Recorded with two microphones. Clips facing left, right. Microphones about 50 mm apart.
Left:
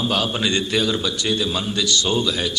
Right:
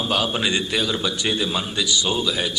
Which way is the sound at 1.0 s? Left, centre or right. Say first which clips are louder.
Left 1 dB; centre.